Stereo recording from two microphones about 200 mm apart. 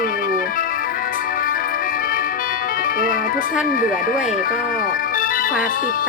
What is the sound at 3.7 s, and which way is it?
Organ, 45° left (ahead or behind).